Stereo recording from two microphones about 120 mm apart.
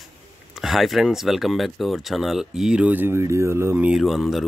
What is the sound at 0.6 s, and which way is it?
Speech, centre (ahead or behind).